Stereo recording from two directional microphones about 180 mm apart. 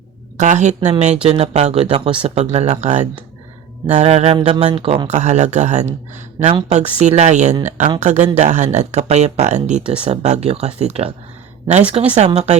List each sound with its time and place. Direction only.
0.3 s speech: 40° right (ahead or behind)